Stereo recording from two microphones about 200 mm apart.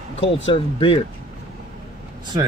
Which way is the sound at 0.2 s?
25° left (ahead or behind).